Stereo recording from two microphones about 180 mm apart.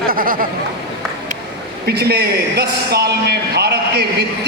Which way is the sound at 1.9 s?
65° right (ahead or behind).